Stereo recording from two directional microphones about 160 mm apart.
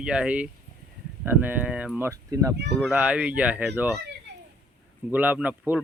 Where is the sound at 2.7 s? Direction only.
5° right (ahead or behind).